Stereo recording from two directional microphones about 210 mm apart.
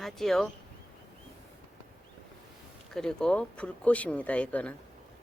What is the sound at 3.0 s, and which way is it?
Speech, 5° left (ahead or behind).